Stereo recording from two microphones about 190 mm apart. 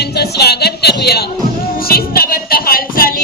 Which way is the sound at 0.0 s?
60° left (ahead or behind).